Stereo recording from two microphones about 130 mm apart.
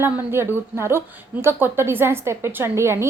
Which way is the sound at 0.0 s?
20° right (ahead or behind).